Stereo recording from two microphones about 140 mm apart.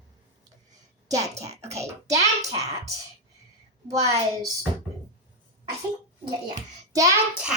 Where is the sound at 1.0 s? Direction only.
25° right (ahead or behind).